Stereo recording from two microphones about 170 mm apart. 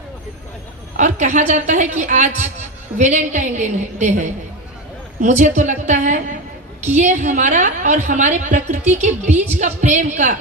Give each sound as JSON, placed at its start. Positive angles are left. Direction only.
{"t": 0.9, "sound": "a woman's voice", "side_deg": -45}
{"t": 9.3, "sound": "a woman's voice", "side_deg": -10}
{"t": 9.6, "sound": "a woman's voice", "side_deg": -45}